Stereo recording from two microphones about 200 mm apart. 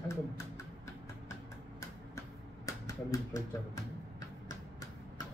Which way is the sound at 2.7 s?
15° left (ahead or behind).